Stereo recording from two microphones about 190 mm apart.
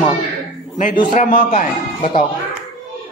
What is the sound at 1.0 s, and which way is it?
A man's voice, 45° left (ahead or behind).